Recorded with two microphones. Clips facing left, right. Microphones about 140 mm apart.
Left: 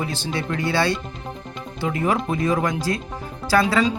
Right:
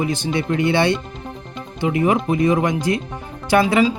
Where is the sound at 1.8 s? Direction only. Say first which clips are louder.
Right 4 dB; 10° right (ahead or behind).